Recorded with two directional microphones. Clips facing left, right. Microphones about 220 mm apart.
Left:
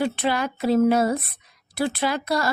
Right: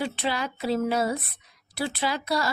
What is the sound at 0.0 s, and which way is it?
Speech, 50° left (ahead or behind).